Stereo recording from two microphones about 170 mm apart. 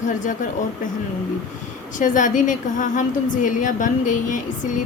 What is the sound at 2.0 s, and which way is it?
A woman's voice, 50° left (ahead or behind).